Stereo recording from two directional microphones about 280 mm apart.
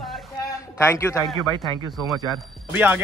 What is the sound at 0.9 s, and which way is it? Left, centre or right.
Speech, centre.